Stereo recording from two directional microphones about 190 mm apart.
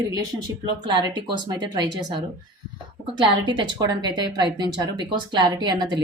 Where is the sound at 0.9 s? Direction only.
20° right (ahead or behind).